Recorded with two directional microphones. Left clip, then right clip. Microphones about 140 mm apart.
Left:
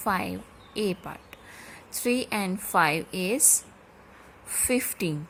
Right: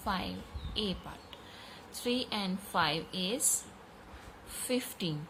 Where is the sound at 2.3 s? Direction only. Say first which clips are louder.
Left 7 dB; 75° left (ahead or behind).